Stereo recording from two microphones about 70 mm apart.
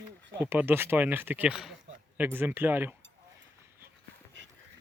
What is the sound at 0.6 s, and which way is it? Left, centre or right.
Speech, right.